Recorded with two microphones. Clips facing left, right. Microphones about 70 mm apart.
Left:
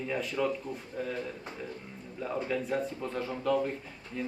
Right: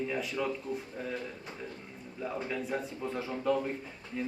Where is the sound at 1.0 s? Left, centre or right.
Centre.